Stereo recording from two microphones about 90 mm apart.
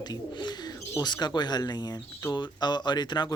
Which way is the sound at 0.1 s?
50° left (ahead or behind).